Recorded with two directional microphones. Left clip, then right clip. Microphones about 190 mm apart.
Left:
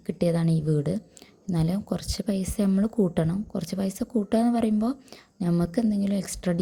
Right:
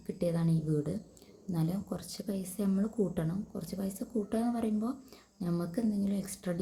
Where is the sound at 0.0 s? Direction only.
40° left (ahead or behind).